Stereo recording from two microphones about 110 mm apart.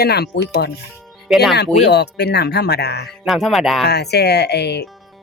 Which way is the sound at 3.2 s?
Centre (ahead or behind).